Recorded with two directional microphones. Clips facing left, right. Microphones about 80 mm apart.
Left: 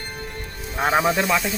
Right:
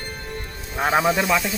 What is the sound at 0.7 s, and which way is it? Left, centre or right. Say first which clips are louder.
Speech: even; centre.